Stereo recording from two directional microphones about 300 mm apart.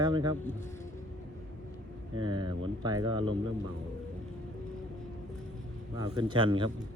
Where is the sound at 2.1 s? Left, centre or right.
Centre.